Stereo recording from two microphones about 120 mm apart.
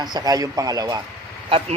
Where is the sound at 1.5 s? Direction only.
50° right (ahead or behind).